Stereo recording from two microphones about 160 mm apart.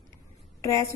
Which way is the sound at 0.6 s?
20° left (ahead or behind).